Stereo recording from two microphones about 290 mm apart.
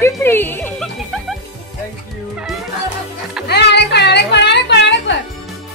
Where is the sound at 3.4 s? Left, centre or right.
Left.